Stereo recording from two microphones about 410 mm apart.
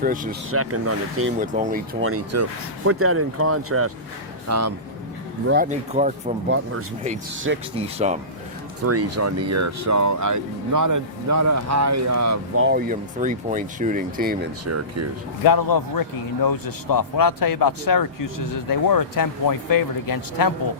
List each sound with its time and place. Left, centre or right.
0.0 s speech: centre
0.5 s speech: right
1.4 s speech: centre; by 4.7 s right
5.5 s speech: centre
7.5 s speech: right
7.8 s speech: centre
8.8 s speech: right
12.6 s speech: right
14.6 s speech: right
15.4 s a man's voice: left